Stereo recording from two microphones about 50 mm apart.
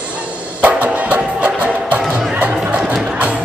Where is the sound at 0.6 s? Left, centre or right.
Right.